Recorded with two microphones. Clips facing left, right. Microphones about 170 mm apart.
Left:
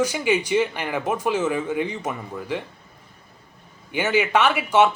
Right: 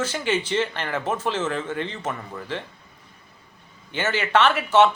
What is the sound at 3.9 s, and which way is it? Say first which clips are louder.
Speech: left 4 dB; 10° left (ahead or behind).